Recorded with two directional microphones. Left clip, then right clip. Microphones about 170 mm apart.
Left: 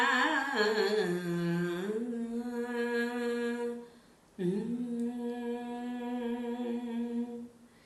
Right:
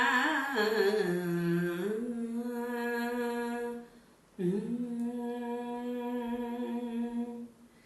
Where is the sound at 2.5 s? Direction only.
20° left (ahead or behind).